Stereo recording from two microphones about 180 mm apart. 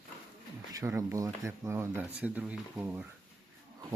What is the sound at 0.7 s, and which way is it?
Speech, 15° right (ahead or behind).